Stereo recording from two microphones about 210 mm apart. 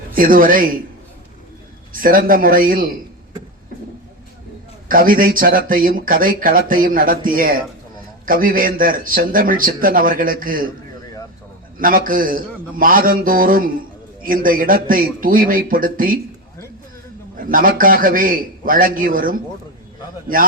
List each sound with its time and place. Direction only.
0.1 s speech: 40° right (ahead or behind)
1.9 s speech: 40° right (ahead or behind)
4.9 s speech: 40° right (ahead or behind)
11.8 s speech: 40° right (ahead or behind)
17.3 s speech: 40° right (ahead or behind)